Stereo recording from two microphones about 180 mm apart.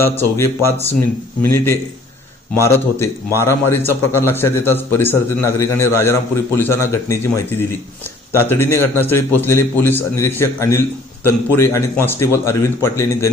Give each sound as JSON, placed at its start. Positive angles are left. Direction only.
{"t": 0.2, "sound": "a man's voice", "side_deg": 15}